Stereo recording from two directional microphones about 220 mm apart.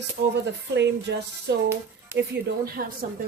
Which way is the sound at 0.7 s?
50° right (ahead or behind).